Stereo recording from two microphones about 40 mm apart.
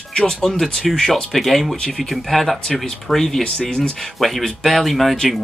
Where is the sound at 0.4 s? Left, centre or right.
Centre.